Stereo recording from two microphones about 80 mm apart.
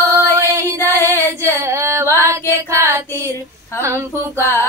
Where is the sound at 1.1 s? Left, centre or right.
Right.